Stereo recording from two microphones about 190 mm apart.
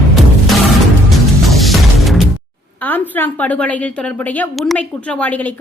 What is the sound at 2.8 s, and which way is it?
A woman's voice, 10° left (ahead or behind).